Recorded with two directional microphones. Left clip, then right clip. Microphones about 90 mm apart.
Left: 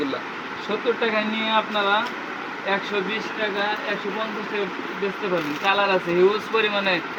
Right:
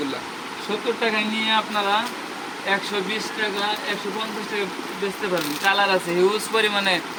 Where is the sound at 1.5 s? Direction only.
10° right (ahead or behind).